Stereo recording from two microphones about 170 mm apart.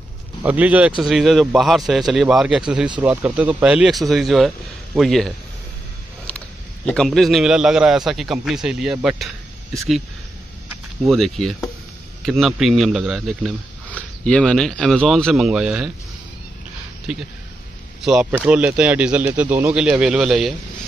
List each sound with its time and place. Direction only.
0.4 s speech: 10° right (ahead or behind)
6.9 s speech: centre (ahead or behind)
11.0 s speech: centre (ahead or behind)
18.0 s speech: centre (ahead or behind)